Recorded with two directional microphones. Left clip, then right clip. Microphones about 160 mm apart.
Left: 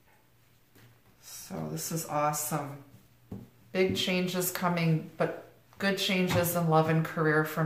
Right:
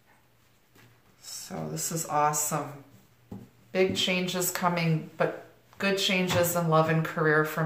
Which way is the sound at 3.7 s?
10° right (ahead or behind).